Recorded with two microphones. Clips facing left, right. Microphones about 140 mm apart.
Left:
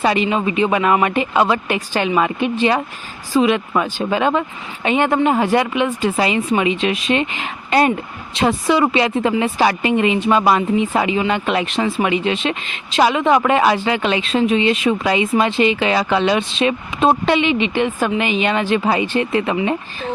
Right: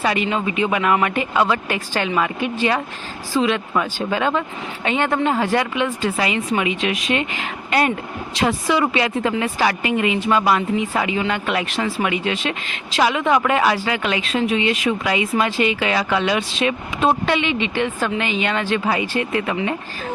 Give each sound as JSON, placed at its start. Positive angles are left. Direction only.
{"t": 0.0, "sound": "speech", "side_deg": 25}